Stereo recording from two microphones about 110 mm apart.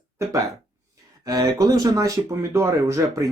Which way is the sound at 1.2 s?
35° right (ahead or behind).